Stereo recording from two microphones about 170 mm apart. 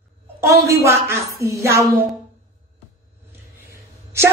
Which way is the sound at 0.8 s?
15° right (ahead or behind).